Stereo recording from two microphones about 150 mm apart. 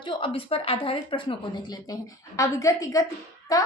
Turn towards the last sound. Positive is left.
turn(degrees=25)  # may be behind; listen again after turning